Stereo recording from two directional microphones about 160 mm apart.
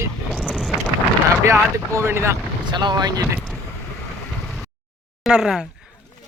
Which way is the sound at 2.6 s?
30° right (ahead or behind).